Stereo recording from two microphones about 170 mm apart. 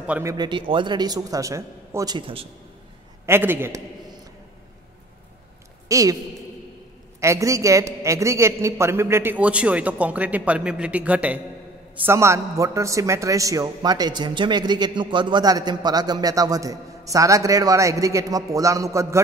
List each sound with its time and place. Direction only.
0.0 s a man's voice: 10° right (ahead or behind)
0.3 s a man's voice: 25° right (ahead or behind)
3.3 s a man's voice: 15° right (ahead or behind)
5.9 s a woman's voice: 20° right (ahead or behind)
7.2 s a man's voice: 15° right (ahead or behind)